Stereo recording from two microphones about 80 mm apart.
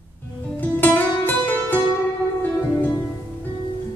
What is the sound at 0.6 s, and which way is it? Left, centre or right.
Music, left.